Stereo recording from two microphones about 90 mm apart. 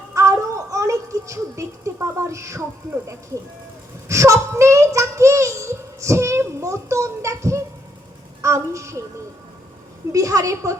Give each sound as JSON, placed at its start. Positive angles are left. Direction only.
{"t": 0.1, "sound": "a sound", "side_deg": -35}
{"t": 4.1, "sound": "a woman's voice", "side_deg": -35}
{"t": 10.1, "sound": "a woman's voice", "side_deg": -35}